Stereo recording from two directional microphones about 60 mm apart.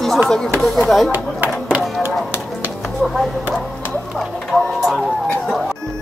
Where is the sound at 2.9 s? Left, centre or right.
Centre.